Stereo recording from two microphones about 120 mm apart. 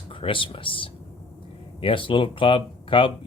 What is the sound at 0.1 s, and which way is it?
A man's voice, 45° left (ahead or behind).